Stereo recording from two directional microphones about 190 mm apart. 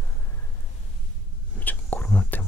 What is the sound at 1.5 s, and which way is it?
Whispering, 10° left (ahead or behind).